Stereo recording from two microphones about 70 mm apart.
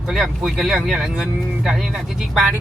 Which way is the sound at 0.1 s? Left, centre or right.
Centre.